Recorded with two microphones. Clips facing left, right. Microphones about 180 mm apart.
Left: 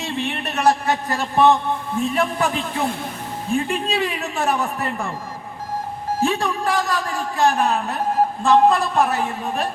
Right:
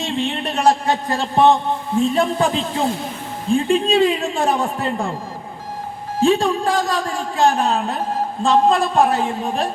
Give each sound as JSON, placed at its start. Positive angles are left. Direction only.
{"t": 0.2, "sound": "a man's voice", "side_deg": -25}
{"t": 6.2, "sound": "a man's voice", "side_deg": -30}